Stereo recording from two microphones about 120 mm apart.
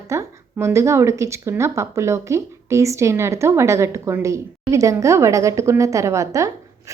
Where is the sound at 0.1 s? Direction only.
25° right (ahead or behind).